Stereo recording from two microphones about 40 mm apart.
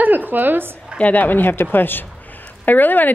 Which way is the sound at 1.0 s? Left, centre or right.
Left.